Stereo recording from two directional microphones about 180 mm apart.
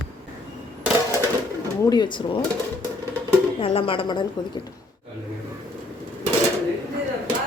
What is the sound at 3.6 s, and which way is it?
Speech, 30° left (ahead or behind).